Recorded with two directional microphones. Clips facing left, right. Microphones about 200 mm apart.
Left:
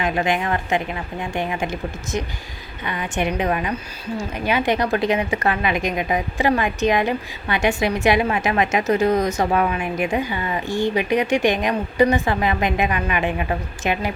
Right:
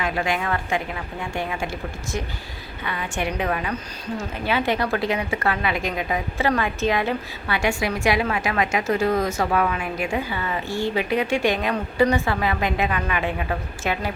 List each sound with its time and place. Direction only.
0.0 s a woman's voice: 20° left (ahead or behind)